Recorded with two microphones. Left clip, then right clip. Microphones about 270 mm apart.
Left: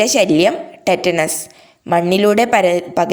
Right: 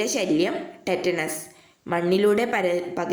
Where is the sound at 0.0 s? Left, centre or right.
Left.